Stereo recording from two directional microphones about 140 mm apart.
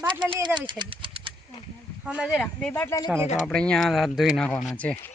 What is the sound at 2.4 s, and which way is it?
Speech, 10° left (ahead or behind).